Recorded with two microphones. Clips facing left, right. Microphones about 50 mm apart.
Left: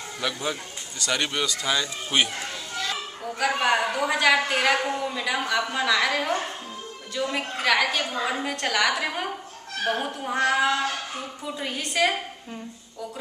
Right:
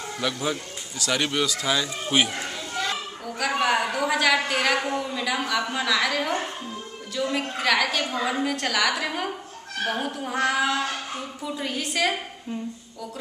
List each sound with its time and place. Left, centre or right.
0.2 s speech: centre
3.3 s a man's voice: centre